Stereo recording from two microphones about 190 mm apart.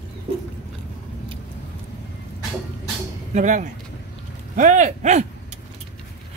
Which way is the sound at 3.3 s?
40° right (ahead or behind).